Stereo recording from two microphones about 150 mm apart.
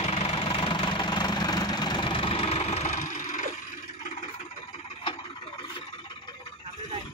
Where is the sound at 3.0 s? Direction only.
60° left (ahead or behind).